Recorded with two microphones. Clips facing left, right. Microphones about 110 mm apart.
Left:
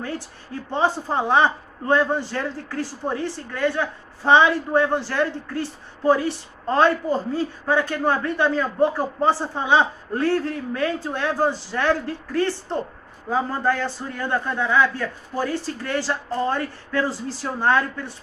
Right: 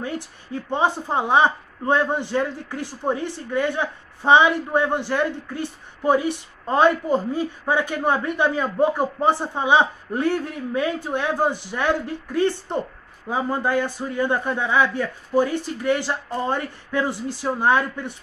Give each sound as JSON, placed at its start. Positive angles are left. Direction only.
{"t": 0.7, "sound": "a man's voice", "side_deg": -15}